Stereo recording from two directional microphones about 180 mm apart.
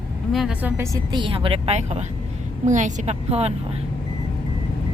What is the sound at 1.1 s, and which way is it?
A woman's voice, 30° right (ahead or behind).